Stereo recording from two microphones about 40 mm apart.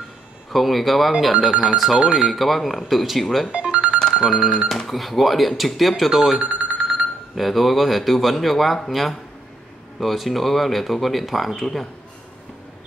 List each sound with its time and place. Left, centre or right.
0.5 s speech: centre
1.5 s speech: centre
2.2 s speech: centre
3.4 s music: right
4.1 s music: centre
4.8 s speech: centre
6.4 s a sound: right
6.8 s a sound: centre
7.3 s speech: centre